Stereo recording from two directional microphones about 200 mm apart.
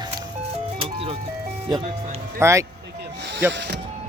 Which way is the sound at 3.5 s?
60° right (ahead or behind).